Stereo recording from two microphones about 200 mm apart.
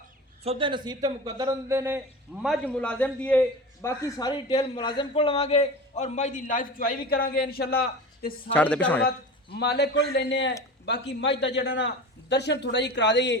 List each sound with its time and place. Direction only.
0.4 s a man's voice: 25° right (ahead or behind)
2.4 s a man's voice: 5° left (ahead or behind); by 8.3 s 50° left (ahead or behind)
8.5 s a man's voice: 5° left (ahead or behind)
9.0 s a man's voice: 55° left (ahead or behind)